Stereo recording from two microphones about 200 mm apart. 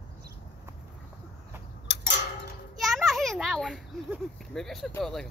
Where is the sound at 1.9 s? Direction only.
60° left (ahead or behind).